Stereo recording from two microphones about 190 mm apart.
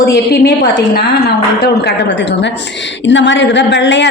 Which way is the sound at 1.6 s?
60° left (ahead or behind).